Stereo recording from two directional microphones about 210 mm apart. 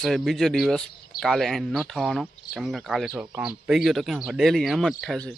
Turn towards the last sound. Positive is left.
turn(degrees=0)  # may be behind; listen again after turning